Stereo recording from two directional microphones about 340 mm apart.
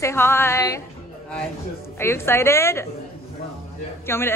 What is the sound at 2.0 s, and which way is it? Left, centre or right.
Speech, centre.